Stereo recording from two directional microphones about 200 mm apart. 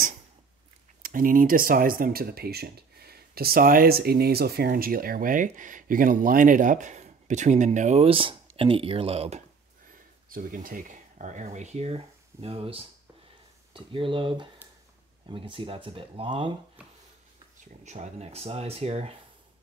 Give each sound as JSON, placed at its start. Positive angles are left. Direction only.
{"t": 1.0, "sound": "speech", "side_deg": -45}
{"t": 10.3, "sound": "speech", "side_deg": -40}
{"t": 17.8, "sound": "speech", "side_deg": -35}